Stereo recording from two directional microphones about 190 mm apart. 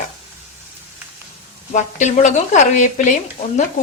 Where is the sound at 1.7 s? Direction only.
40° left (ahead or behind).